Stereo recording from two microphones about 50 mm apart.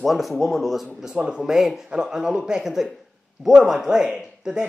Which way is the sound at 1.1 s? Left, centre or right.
Right.